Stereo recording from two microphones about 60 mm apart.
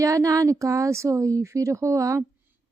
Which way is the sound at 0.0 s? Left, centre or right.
Right.